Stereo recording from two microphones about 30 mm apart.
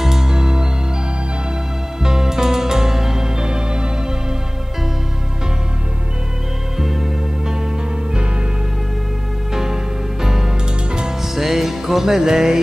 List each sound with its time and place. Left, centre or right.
0.0 s music: centre
2.0 s music: centre
3.3 s music: right
6.8 s music: centre
9.5 s music: centre
10.9 s music: right
11.3 s music: centre